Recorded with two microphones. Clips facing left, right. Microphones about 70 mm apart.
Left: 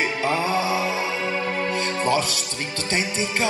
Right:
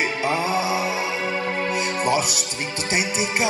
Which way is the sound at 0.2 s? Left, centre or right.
Centre.